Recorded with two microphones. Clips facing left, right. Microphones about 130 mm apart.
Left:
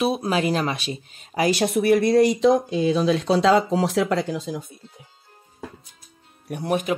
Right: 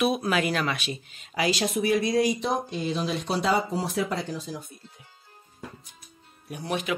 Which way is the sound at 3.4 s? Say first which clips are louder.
Left 5 dB; 90° left.